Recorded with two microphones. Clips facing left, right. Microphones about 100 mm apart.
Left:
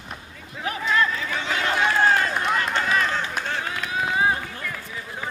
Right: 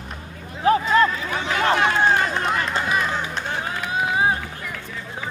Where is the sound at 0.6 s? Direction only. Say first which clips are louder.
Right 7 dB; 35° right (ahead or behind).